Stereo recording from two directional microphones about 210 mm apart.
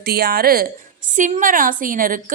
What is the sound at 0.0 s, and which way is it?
A woman's voice, 50° right (ahead or behind).